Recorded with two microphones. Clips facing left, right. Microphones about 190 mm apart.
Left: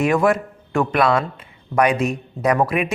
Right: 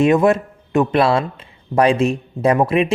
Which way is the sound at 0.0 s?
25° right (ahead or behind).